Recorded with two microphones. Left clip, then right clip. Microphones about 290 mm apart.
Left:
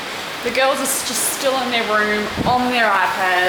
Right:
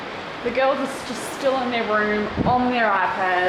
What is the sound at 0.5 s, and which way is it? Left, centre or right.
Speech, centre.